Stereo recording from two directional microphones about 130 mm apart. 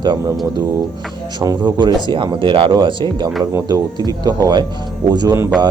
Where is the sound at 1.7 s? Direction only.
35° right (ahead or behind).